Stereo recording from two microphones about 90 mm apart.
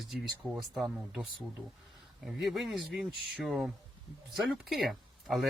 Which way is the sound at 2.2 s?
5° right (ahead or behind).